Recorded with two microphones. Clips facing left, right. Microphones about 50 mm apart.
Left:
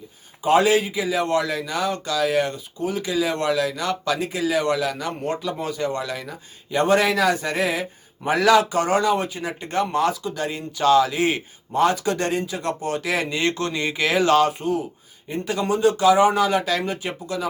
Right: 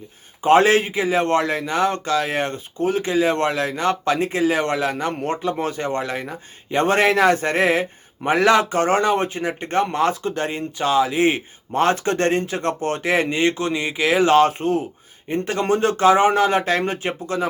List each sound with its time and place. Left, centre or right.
0.4 s a man's voice: right
10.8 s a man's voice: right
14.2 s a man's voice: right